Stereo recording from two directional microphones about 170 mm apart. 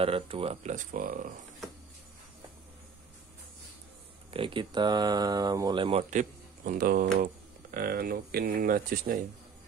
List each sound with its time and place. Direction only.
0.0 s speech: 35° right (ahead or behind)
0.7 s speech: 50° right (ahead or behind)
4.3 s speech: 30° right (ahead or behind)
6.0 s speech: 45° right (ahead or behind)